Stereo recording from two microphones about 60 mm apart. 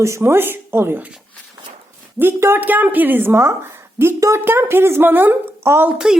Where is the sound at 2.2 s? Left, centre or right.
Right.